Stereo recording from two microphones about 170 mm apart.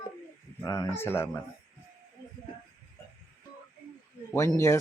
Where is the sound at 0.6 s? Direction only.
20° left (ahead or behind).